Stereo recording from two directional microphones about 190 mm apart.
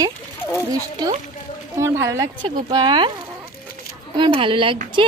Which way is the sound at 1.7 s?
15° right (ahead or behind).